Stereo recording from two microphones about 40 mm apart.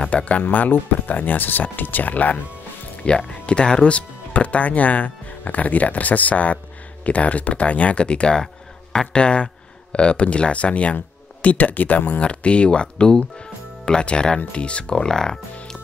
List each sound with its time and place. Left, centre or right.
0.1 s speech: left
0.4 s speech: left
3.0 s speech: left
11.4 s speech: left
12.2 s speech: left